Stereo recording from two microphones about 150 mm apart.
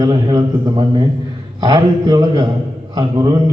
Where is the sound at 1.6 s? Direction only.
30° right (ahead or behind).